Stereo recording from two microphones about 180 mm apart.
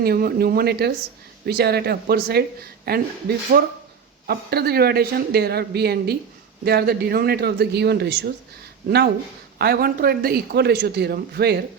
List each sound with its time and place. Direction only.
0.0 s a man's voice: 55° right (ahead or behind)
9.6 s a man's voice: 55° right (ahead or behind)